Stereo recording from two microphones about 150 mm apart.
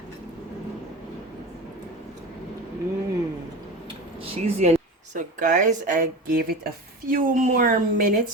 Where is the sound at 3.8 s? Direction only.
40° right (ahead or behind).